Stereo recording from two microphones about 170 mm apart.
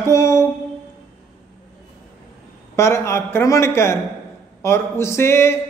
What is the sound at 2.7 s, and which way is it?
Speech, 15° left (ahead or behind).